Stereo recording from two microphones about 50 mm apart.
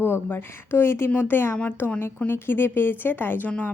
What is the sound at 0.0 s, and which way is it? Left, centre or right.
Speech, left.